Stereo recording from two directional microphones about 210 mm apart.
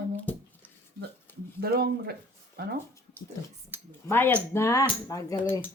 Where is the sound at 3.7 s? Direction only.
10° right (ahead or behind).